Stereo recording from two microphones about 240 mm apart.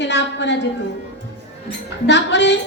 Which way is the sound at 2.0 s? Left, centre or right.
Left.